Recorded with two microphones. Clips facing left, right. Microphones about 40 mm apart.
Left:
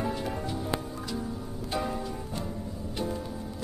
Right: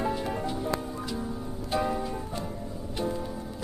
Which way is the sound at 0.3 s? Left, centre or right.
Centre.